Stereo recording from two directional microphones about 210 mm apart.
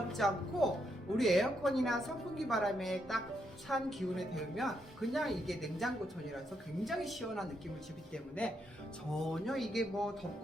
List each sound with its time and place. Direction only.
0.1 s a woman's voice: centre (ahead or behind)